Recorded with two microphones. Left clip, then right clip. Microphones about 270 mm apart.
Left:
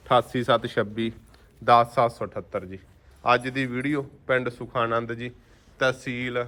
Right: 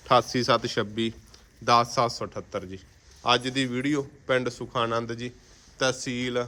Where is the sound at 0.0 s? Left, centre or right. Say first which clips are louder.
Even; centre.